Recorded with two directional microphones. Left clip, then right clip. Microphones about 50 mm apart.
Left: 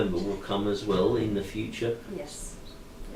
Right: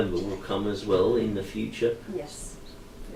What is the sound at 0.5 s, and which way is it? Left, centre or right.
Speech, centre.